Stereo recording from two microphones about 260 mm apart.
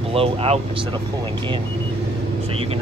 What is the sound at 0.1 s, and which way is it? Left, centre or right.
Speech, right.